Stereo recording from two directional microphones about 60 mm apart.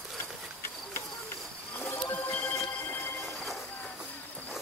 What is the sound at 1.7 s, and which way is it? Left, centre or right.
Wild animals, left.